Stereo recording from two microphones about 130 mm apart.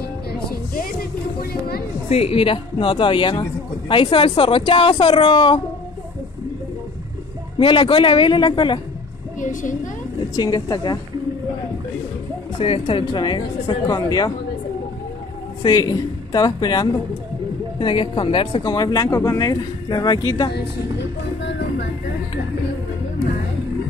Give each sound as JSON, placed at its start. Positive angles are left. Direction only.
{"t": 2.0, "sound": "speech", "side_deg": 50}
{"t": 7.5, "sound": "speech", "side_deg": 40}
{"t": 9.4, "sound": "a woman's voice", "side_deg": 80}
{"t": 10.3, "sound": "speech", "side_deg": 30}
{"t": 12.5, "sound": "speech", "side_deg": 45}
{"t": 15.6, "sound": "speech", "side_deg": 30}
{"t": 18.6, "sound": "speech", "side_deg": 30}